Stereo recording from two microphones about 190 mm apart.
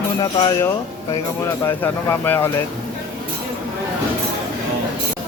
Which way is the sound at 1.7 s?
10° left (ahead or behind).